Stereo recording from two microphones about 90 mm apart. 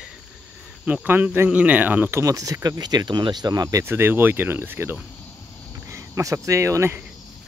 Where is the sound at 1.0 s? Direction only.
20° right (ahead or behind).